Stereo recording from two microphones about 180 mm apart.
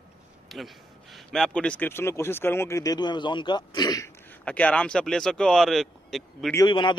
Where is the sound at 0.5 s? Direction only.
Centre (ahead or behind); by 4.1 s 20° left (ahead or behind).